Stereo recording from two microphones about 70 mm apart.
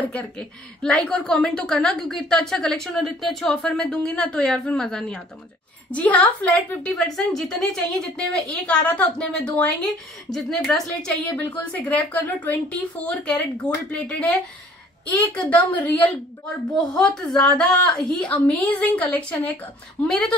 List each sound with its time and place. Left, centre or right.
0.1 s a woman's voice: centre
5.9 s a woman's voice: left
7.0 s a woman's voice: centre
8.6 s a woman's voice: centre
11.2 s a woman's voice: left
16.9 s a woman's voice: centre
18.2 s a woman's voice: centre